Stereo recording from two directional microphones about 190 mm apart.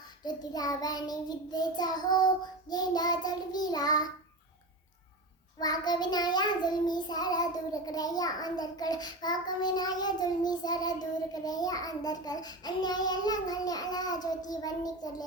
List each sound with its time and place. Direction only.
0.3 s child singing: 20° left (ahead or behind)
5.5 s child singing: 20° left (ahead or behind)